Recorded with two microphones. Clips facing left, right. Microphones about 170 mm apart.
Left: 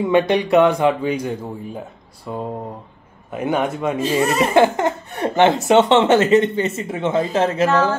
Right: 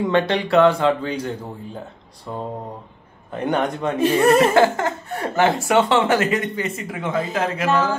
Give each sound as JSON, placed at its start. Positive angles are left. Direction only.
{"t": 0.0, "sound": "a man's voice", "side_deg": 10}
{"t": 4.0, "sound": "speech", "side_deg": -55}
{"t": 4.6, "sound": "speech", "side_deg": 20}